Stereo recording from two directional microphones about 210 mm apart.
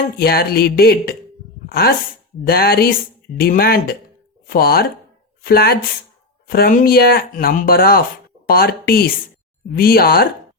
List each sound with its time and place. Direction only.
0.2 s speech: 45° left (ahead or behind)
2.5 s a woman's voice: 45° left (ahead or behind)